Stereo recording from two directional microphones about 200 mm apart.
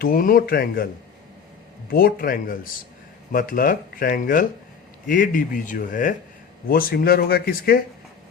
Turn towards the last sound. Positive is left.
turn(degrees=50)  # may be behind; listen again after turning